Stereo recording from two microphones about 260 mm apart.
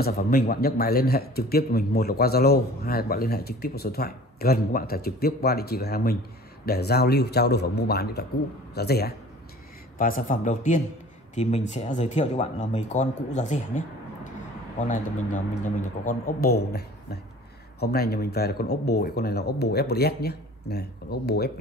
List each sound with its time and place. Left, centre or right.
0.0 s a man's voice: left